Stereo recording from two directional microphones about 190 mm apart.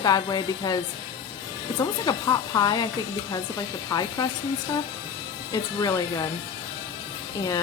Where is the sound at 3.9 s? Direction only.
20° left (ahead or behind).